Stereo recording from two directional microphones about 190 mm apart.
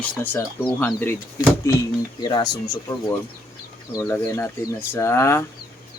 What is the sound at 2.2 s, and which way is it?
Speech, 20° left (ahead or behind).